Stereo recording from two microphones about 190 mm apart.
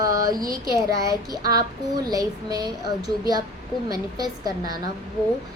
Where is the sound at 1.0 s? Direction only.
20° right (ahead or behind).